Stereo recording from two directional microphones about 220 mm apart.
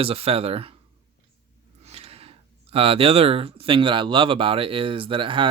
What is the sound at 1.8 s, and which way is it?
Speech, 25° right (ahead or behind).